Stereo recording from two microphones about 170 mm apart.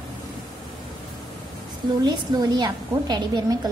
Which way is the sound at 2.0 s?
25° right (ahead or behind).